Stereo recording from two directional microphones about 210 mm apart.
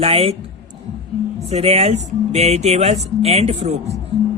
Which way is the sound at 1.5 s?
30° right (ahead or behind).